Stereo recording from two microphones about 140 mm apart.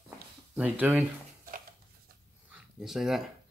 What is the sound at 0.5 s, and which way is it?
Speech, 10° right (ahead or behind).